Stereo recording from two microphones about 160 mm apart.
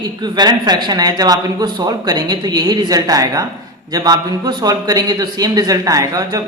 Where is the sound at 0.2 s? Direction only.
25° right (ahead or behind).